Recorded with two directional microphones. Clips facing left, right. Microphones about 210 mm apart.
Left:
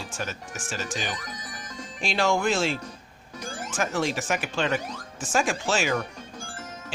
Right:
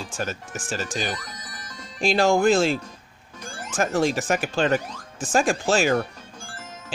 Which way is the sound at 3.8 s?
35° right (ahead or behind).